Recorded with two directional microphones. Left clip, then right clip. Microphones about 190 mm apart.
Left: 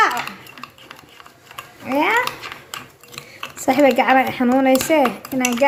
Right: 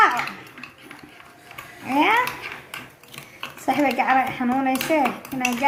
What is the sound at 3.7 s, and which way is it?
A woman's voice, 40° left (ahead or behind).